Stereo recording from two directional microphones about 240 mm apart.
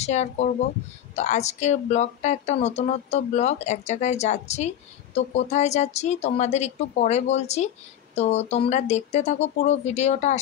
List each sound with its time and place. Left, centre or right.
0.0 s speech: left